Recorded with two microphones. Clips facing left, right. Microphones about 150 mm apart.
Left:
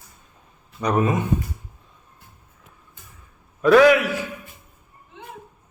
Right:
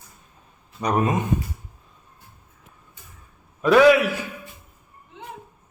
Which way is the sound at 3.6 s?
20° right (ahead or behind).